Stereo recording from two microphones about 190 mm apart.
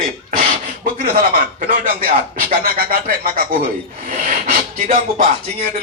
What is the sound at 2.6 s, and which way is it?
Rub, 50° right (ahead or behind).